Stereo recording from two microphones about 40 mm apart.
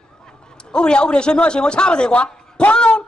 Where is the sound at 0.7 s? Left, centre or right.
Left.